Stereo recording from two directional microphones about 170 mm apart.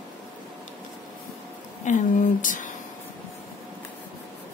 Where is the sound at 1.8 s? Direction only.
50° left (ahead or behind).